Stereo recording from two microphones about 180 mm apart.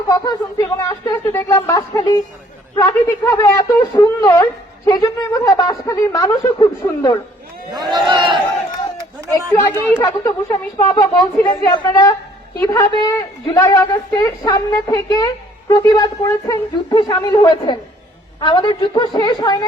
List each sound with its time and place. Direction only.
0.1 s a woman's voice: 20° left (ahead or behind)
7.7 s speech: 25° right (ahead or behind)
10.0 s a woman's voice: 20° left (ahead or behind)